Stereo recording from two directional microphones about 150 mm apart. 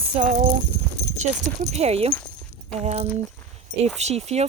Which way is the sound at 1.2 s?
45° right (ahead or behind).